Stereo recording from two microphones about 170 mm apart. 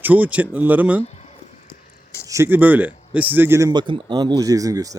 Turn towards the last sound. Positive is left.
turn(degrees=-20)  # may be behind; listen again after turning